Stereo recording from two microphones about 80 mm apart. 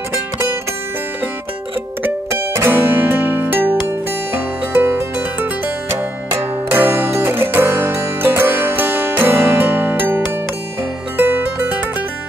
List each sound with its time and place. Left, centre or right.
2.3 s music: right